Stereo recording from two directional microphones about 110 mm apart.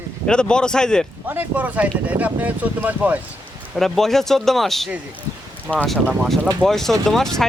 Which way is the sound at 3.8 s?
Centre (ahead or behind).